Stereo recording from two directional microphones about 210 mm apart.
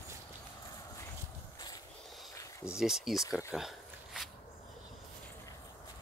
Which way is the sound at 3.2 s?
15° left (ahead or behind).